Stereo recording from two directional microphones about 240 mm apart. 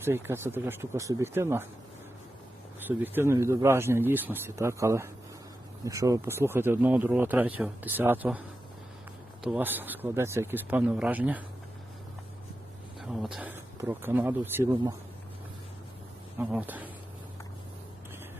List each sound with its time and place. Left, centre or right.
0.0 s speech: centre
2.8 s speech: centre
9.4 s speech: centre
13.0 s speech: centre
16.4 s speech: centre